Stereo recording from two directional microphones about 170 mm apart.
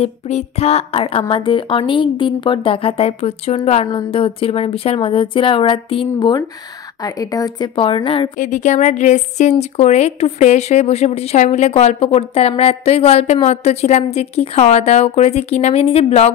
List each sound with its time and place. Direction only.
0.0 s a woman's voice: 40° left (ahead or behind)
8.4 s a woman's voice: 45° left (ahead or behind)